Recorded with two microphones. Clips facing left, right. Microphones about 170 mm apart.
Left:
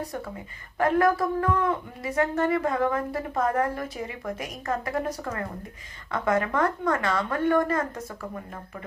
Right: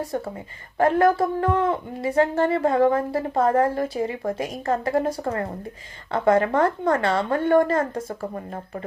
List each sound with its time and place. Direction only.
0.8 s speech: 30° right (ahead or behind)